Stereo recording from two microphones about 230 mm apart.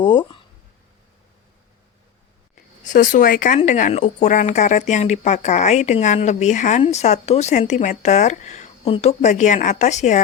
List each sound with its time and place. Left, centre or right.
0.0 s speech: left
2.8 s speech: left